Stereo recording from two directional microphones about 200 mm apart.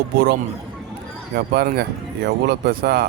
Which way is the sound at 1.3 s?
50° right (ahead or behind).